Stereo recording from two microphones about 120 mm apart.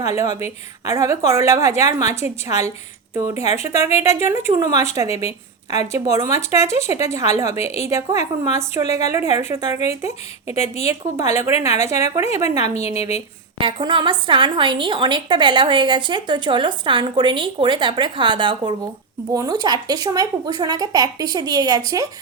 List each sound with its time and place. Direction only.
0.0 s speech: 25° right (ahead or behind)
5.0 s a woman's voice: 60° left (ahead or behind)
5.7 s speech: 25° right (ahead or behind)
12.7 s a woman's voice: 60° left (ahead or behind)
13.6 s a woman's voice: 45° right (ahead or behind)
19.3 s a woman's voice: 30° right (ahead or behind)